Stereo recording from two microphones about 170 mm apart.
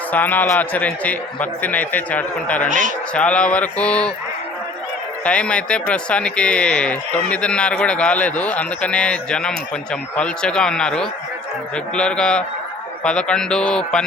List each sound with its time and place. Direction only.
0.1 s a man's voice: 10° left (ahead or behind)
2.6 s speech: 50° right (ahead or behind)
3.2 s a man's voice: 5° left (ahead or behind)
5.2 s a man's voice: 5° left (ahead or behind)